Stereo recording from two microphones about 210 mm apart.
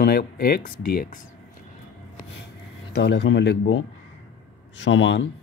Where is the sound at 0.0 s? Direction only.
50° left (ahead or behind).